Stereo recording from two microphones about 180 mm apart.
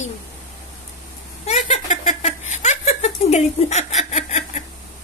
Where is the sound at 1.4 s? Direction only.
40° left (ahead or behind).